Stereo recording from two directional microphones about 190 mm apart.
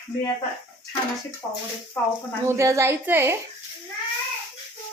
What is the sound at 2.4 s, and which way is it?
Speech, 15° right (ahead or behind).